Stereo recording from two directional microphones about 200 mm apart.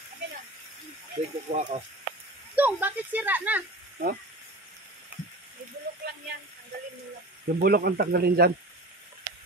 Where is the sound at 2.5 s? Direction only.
10° right (ahead or behind).